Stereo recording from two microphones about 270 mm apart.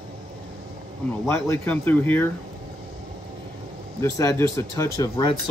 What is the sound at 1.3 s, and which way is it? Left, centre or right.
Speech, centre.